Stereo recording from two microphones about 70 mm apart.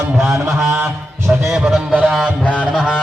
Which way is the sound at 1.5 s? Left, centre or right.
Centre.